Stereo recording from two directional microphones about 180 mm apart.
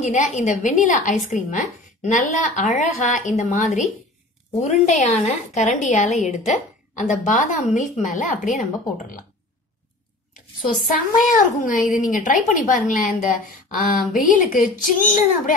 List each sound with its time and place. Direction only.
0.0 s a woman's voice: 40° left (ahead or behind)
10.9 s a woman's voice: 45° left (ahead or behind)